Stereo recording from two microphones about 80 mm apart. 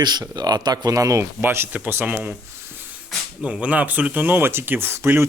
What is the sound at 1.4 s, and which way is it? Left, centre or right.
Speech, right.